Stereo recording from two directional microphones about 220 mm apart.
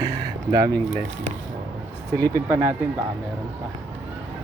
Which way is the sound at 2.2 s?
10° right (ahead or behind).